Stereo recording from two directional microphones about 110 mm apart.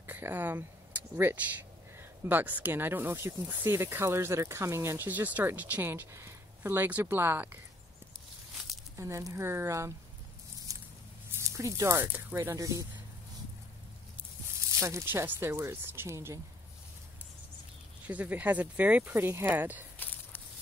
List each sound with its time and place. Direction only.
0.0 s speech: 20° right (ahead or behind)
8.9 s speech: 25° right (ahead or behind)
10.7 s squish: 30° right (ahead or behind)
11.3 s speech: 25° right (ahead or behind)
12.4 s speech: 30° right (ahead or behind)
14.8 s speech: 25° right (ahead or behind)
18.0 s speech: 15° right (ahead or behind)